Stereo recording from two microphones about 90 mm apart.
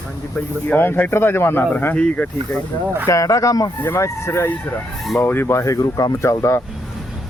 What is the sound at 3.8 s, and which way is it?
Speech, 25° left (ahead or behind).